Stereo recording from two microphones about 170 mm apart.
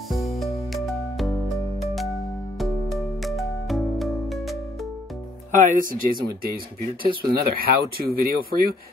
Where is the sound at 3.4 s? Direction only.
Centre (ahead or behind).